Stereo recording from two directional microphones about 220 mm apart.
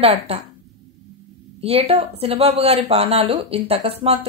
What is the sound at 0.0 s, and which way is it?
Speech, 25° right (ahead or behind).